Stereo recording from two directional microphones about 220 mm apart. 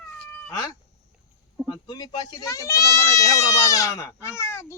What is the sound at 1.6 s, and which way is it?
Speech, 20° left (ahead or behind).